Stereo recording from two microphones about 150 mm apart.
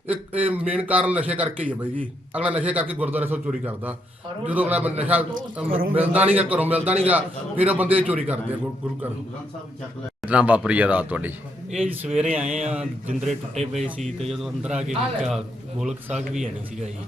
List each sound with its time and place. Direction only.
0.1 s a man's voice: 10° right (ahead or behind)
10.2 s a man's voice: 10° right (ahead or behind)
13.6 s speech: 45° right (ahead or behind)
14.3 s speech: 5° right (ahead or behind)